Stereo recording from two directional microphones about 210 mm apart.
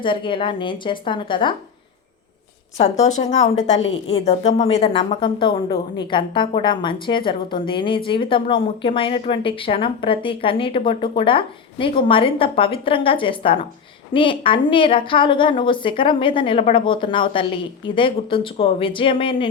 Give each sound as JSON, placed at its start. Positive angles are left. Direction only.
{"t": 0.0, "sound": "speech", "side_deg": 25}
{"t": 3.0, "sound": "speech", "side_deg": 35}